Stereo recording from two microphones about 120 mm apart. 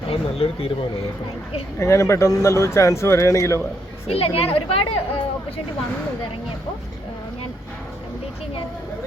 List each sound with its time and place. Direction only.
0.1 s speech: 55° left (ahead or behind)
1.8 s speech: 25° left (ahead or behind)
4.0 s speech: 55° left (ahead or behind)